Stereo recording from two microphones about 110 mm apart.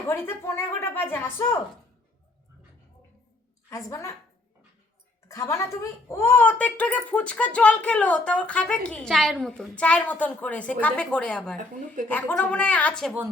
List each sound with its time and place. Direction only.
0.1 s a woman's voice: 20° left (ahead or behind)
3.7 s a woman's voice: 30° left (ahead or behind)
5.3 s speech: 25° left (ahead or behind)